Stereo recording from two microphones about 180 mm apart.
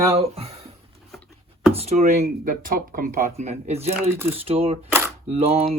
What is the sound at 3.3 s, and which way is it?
Speech, 40° right (ahead or behind).